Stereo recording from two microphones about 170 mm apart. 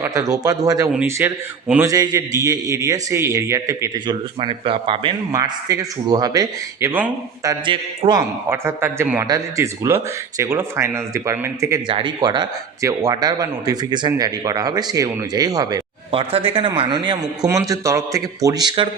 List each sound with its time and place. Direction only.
0.0 s a man's voice: 20° right (ahead or behind)
0.9 s speech: 10° right (ahead or behind)
1.8 s a man's voice: 20° right (ahead or behind)
5.3 s a man's voice: 20° right (ahead or behind)
7.4 s a man's voice: 30° right (ahead or behind)
8.4 s a man's voice: 15° right (ahead or behind)
16.3 s a man's voice: 35° right (ahead or behind)